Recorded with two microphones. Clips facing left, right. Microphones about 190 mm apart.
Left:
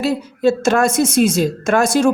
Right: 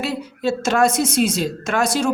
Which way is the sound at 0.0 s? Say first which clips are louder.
Left 7 dB; 45° left (ahead or behind).